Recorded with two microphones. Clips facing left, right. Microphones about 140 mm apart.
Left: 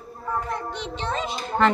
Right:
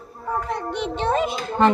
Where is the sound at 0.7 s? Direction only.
55° right (ahead or behind).